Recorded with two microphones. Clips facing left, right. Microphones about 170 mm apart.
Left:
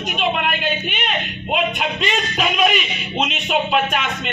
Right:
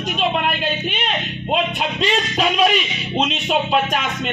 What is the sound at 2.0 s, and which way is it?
Music, 35° right (ahead or behind).